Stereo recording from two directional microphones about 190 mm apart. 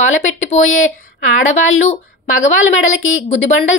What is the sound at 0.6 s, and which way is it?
Speech, 90° left.